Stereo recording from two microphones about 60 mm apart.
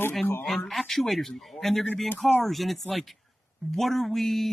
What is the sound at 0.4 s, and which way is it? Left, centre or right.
Speech, centre.